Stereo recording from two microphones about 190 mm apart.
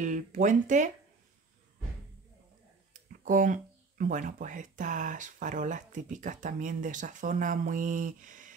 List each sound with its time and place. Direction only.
0.0 s speech: 40° right (ahead or behind)
2.9 s a sound: 45° right (ahead or behind)
4.0 s speech: 45° right (ahead or behind)